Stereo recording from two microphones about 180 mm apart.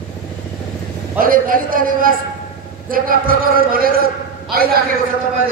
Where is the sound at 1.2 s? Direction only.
50° right (ahead or behind).